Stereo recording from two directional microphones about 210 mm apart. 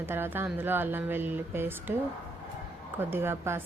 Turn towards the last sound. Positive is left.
turn(degrees=-10)  # may be behind; listen again after turning